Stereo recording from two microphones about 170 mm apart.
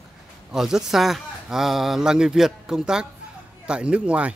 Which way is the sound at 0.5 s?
5° right (ahead or behind).